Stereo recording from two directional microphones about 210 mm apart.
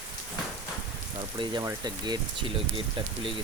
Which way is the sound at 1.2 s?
20° right (ahead or behind).